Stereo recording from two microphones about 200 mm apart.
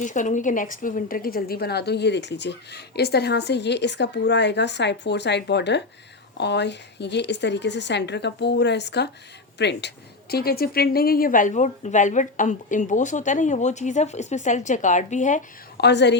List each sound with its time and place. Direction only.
0.0 s a woman's voice: 40° left (ahead or behind)
15.8 s a woman's voice: 60° left (ahead or behind)